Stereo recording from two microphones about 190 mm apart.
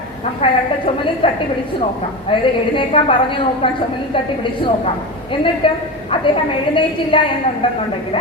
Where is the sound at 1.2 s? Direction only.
30° left (ahead or behind).